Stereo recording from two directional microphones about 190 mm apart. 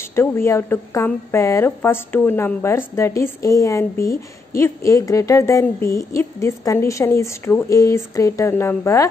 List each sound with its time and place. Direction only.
0.1 s a woman's voice: 15° left (ahead or behind)